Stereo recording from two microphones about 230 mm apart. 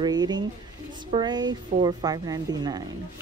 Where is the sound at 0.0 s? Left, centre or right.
Centre.